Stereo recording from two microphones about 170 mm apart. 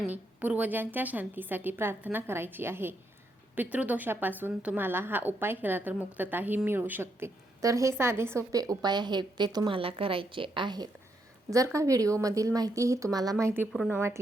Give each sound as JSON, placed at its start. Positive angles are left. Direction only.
{"t": 0.0, "sound": "a woman's voice", "side_deg": -10}